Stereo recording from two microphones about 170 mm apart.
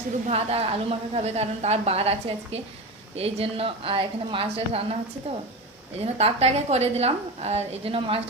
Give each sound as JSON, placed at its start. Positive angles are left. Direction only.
{"t": 0.3, "sound": "a woman's voice", "side_deg": -35}